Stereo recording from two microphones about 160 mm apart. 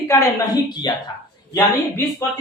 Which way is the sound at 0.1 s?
20° left (ahead or behind).